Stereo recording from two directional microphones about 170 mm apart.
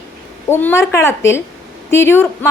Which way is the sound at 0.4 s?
15° left (ahead or behind).